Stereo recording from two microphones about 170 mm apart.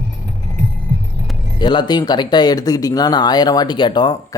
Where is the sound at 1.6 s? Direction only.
25° left (ahead or behind).